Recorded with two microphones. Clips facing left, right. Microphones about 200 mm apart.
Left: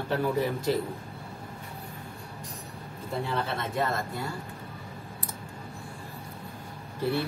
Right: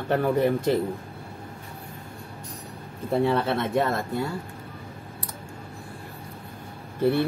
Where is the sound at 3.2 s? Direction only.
60° right (ahead or behind).